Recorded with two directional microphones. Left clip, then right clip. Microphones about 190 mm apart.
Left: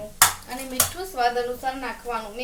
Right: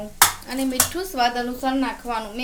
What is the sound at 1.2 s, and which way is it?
A woman's voice, 55° right (ahead or behind).